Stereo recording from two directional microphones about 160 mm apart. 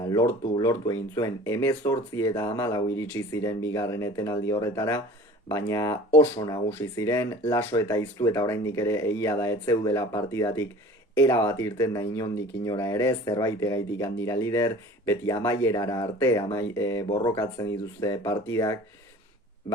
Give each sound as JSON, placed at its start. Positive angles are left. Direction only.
{"t": 0.1, "sound": "speech", "side_deg": 25}